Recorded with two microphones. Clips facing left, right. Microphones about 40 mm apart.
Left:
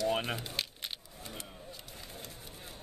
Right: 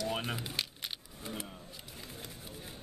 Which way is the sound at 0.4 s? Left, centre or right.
Centre.